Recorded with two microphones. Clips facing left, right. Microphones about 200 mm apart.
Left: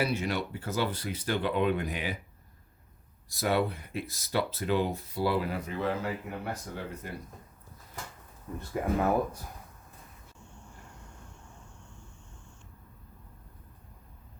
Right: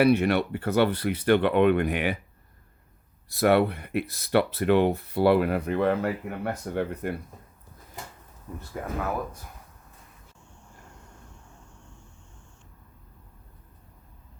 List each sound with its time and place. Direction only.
0.0 s speech: 60° right (ahead or behind)
3.2 s speech: 65° right (ahead or behind)
8.7 s speech: 5° left (ahead or behind)